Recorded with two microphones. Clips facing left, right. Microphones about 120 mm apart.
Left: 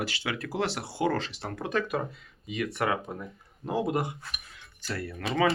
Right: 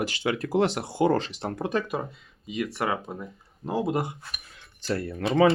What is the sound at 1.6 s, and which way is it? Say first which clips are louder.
Speech: right 1 dB; 35° right (ahead or behind).